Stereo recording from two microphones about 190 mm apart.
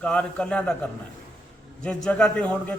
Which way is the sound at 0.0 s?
5° left (ahead or behind).